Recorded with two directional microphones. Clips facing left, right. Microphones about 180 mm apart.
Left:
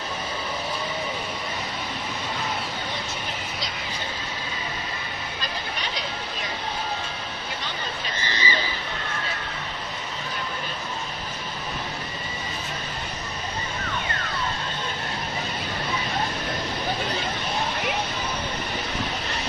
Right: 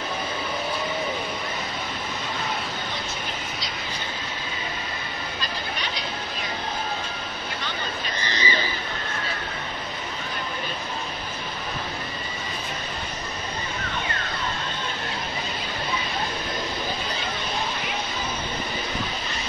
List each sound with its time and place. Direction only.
8.2 s neigh: 20° right (ahead or behind)